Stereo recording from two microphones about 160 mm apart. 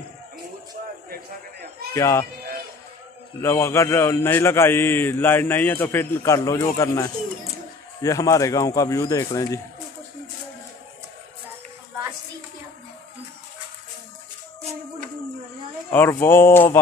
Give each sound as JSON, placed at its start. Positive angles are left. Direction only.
{"t": 2.0, "sound": "a man's voice", "side_deg": 15}
{"t": 3.3, "sound": "a man's voice", "side_deg": 15}
{"t": 14.6, "sound": "music", "side_deg": -45}
{"t": 15.9, "sound": "a man's voice", "side_deg": 15}